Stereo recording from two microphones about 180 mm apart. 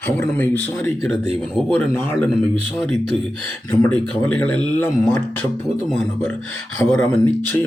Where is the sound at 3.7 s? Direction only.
10° left (ahead or behind).